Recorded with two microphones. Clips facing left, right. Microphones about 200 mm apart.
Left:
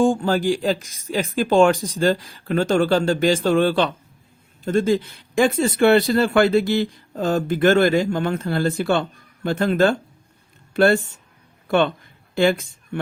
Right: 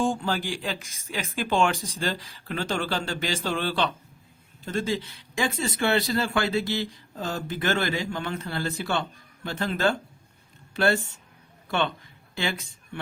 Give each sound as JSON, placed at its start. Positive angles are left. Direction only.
{"t": 0.0, "sound": "speech", "side_deg": 45}
{"t": 12.3, "sound": "speech", "side_deg": 50}